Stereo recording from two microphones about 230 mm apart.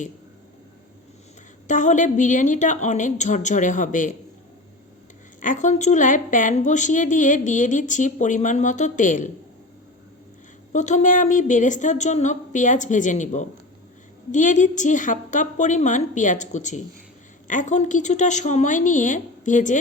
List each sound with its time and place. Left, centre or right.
1.6 s a woman's voice: left
5.4 s a woman's voice: left
10.7 s a woman's voice: left